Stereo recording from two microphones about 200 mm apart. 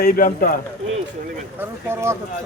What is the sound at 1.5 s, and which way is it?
Speech, 10° right (ahead or behind).